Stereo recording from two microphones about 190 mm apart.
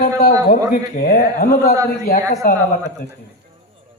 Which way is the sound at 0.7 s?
50° left (ahead or behind).